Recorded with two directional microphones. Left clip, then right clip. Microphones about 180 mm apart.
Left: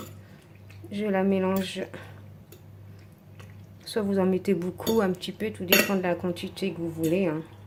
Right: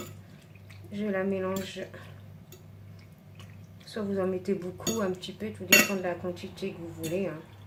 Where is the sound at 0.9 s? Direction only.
60° left (ahead or behind).